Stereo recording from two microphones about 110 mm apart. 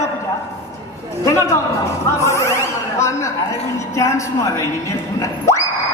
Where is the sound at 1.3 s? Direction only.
25° left (ahead or behind).